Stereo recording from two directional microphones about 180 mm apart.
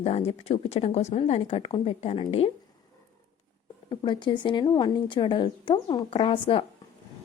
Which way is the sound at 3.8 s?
25° left (ahead or behind).